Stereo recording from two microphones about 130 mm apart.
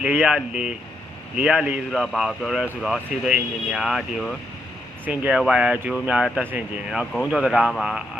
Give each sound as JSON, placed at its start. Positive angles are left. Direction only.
{"t": 0.0, "sound": "speech", "side_deg": -10}
{"t": 5.0, "sound": "speech", "side_deg": -10}
{"t": 7.0, "sound": "speech", "side_deg": 0}